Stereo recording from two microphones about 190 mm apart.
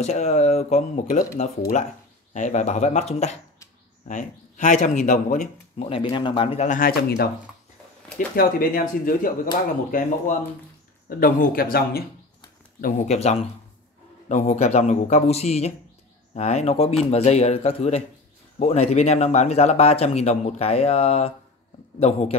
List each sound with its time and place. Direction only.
0.0 s speech: 35° left (ahead or behind)
2.3 s speech: 40° left (ahead or behind)
5.9 s speech: 30° left (ahead or behind); by 7.2 s 55° left (ahead or behind)
8.4 s speech: 50° left (ahead or behind)
12.8 s speech: 40° left (ahead or behind)